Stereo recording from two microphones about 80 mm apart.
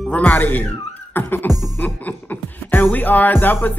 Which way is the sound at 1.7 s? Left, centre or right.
Left.